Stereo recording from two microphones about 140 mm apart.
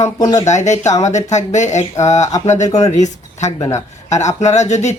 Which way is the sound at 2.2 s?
25° left (ahead or behind).